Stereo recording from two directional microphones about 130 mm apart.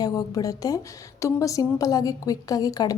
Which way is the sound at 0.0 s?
30° left (ahead or behind).